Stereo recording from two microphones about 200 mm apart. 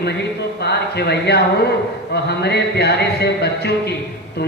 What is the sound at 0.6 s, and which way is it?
A man's voice, 55° left (ahead or behind).